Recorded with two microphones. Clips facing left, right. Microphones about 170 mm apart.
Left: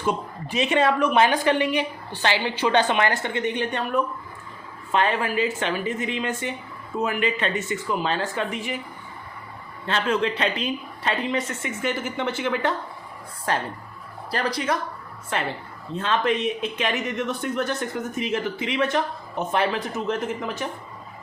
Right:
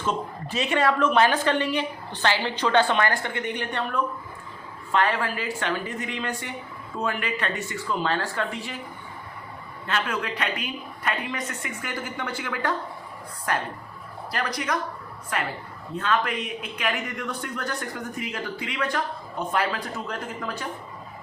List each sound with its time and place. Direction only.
0.0 s a woman's voice: 15° left (ahead or behind)
9.8 s speech: 25° left (ahead or behind)